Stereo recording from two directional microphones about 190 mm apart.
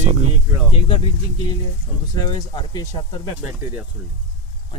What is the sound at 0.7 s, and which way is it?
Speech, 30° left (ahead or behind).